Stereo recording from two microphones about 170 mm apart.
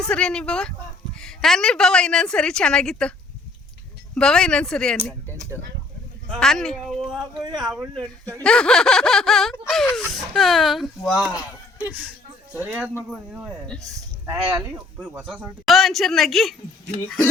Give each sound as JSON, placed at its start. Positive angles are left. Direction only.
{"t": 0.0, "sound": "a woman's voice", "side_deg": 5}
{"t": 4.1, "sound": "a woman's voice", "side_deg": 5}
{"t": 5.0, "sound": "a sound", "side_deg": 5}
{"t": 6.3, "sound": "a woman's voice", "side_deg": 0}
{"t": 7.4, "sound": "speech", "side_deg": -25}
{"t": 8.4, "sound": "a woman's voice", "side_deg": 5}
{"t": 11.3, "sound": "speech", "side_deg": 20}
{"t": 12.5, "sound": "speech", "side_deg": -10}
{"t": 13.7, "sound": "speech", "side_deg": -20}
{"t": 15.2, "sound": "a woman's voice", "side_deg": 0}